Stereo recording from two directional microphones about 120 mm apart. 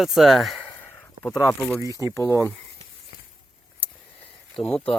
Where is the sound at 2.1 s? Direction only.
25° left (ahead or behind).